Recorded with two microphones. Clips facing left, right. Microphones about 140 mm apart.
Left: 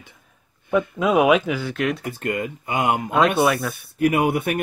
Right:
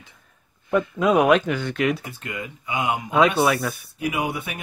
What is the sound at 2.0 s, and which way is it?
Speech, 55° left (ahead or behind).